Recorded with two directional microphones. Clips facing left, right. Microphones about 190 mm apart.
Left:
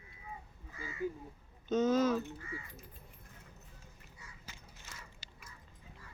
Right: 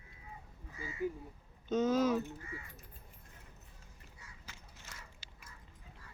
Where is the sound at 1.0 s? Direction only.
15° right (ahead or behind).